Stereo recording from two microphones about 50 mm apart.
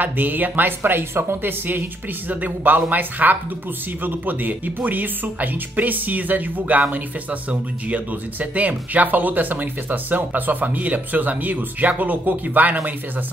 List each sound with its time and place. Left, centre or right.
0.0 s speech: right